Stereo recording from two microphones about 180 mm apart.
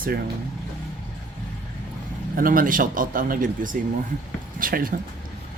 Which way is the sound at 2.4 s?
50° right (ahead or behind).